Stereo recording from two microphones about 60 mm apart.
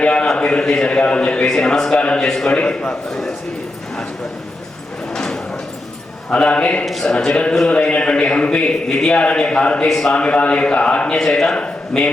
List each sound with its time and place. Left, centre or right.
0.0 s a sound: centre
0.3 s a man's voice: centre
3.1 s a man's voice: centre
5.1 s sliding door: centre
6.3 s a man's voice: centre